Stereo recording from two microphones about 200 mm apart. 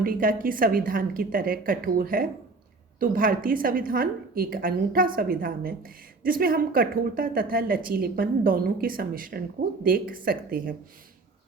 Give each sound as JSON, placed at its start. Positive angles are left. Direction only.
{"t": 0.0, "sound": "a woman's voice", "side_deg": -45}